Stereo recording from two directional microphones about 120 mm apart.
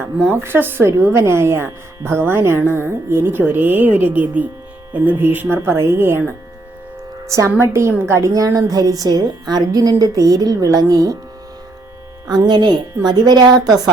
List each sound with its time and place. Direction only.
0.0 s a woman's voice: 20° right (ahead or behind)
12.3 s a woman's voice: 35° right (ahead or behind)